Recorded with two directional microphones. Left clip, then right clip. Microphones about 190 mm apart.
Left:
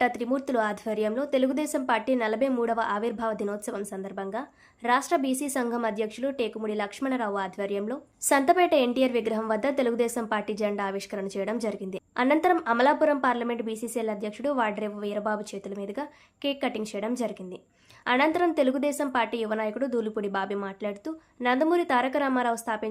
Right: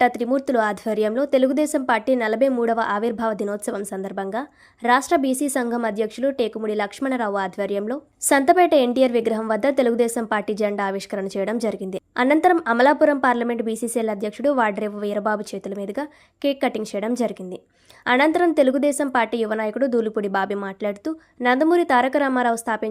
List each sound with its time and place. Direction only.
0.0 s a woman's voice: 25° right (ahead or behind)